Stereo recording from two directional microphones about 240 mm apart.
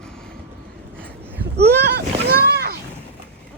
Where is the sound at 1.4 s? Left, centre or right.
Right.